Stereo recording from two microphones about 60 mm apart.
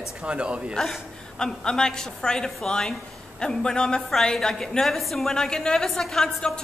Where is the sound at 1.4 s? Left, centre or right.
Centre.